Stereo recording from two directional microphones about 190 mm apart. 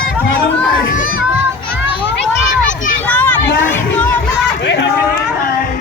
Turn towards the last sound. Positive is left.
turn(degrees=65)  # may be behind; listen again after turning